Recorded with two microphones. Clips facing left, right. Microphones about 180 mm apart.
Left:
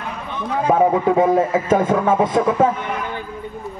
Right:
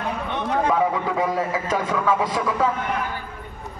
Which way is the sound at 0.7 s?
45° left (ahead or behind).